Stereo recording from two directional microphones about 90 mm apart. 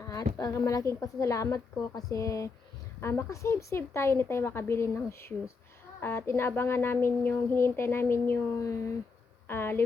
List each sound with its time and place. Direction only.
0.0 s a woman's voice: 35° left (ahead or behind)